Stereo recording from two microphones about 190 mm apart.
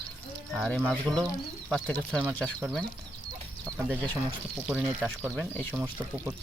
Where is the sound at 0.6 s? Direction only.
Centre (ahead or behind).